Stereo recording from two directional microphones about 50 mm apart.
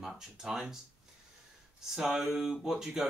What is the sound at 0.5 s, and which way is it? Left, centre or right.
Speech, centre.